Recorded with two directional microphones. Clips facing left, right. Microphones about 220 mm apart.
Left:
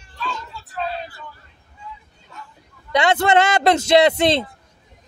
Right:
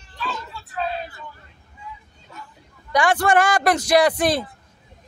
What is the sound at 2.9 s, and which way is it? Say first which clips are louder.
A man's voice: left 1 dB; 25° left (ahead or behind).